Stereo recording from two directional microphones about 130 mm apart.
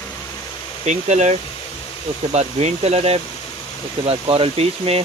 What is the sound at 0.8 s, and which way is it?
Speech, 60° right (ahead or behind).